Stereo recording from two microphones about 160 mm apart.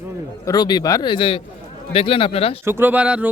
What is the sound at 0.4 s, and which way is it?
Speech, 25° left (ahead or behind).